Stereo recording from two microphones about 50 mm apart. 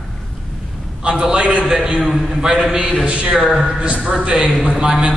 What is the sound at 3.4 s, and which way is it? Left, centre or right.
Speech, centre.